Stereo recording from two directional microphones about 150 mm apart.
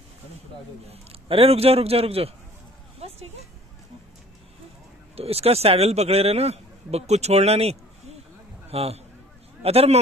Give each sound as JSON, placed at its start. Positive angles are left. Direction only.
{"t": 0.8, "sound": "a man's voice", "side_deg": -40}
{"t": 3.0, "sound": "a sound", "side_deg": -45}
{"t": 5.1, "sound": "a man's voice", "side_deg": -40}